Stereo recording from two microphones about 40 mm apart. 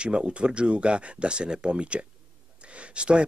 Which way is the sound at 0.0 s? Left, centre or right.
Right.